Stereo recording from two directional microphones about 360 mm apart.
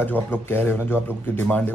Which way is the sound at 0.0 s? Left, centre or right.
Centre.